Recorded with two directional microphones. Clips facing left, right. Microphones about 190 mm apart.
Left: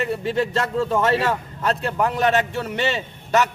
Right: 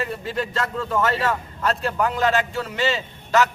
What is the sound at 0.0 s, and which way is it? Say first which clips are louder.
A man's voice: left 4 dB; 25° left (ahead or behind).